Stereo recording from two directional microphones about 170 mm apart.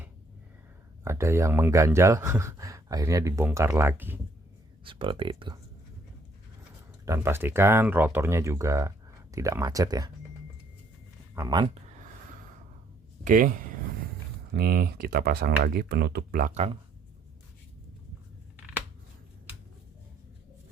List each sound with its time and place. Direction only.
1.0 s speech: 15° right (ahead or behind)
4.8 s speech: 30° right (ahead or behind)
7.0 s speech: 15° right (ahead or behind)
11.3 s speech: 25° right (ahead or behind)
13.2 s speech: 50° right (ahead or behind)
14.5 s speech: 65° right (ahead or behind)